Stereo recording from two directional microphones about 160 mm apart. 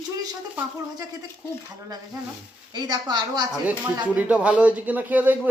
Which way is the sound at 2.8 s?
25° right (ahead or behind).